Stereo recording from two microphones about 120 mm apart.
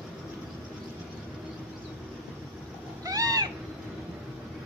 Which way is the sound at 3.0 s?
30° right (ahead or behind).